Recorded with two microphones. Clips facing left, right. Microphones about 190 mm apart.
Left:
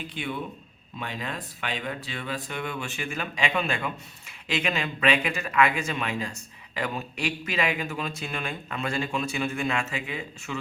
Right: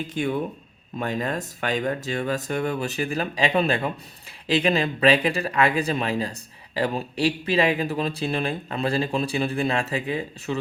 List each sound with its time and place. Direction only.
0.1 s speech: 45° right (ahead or behind)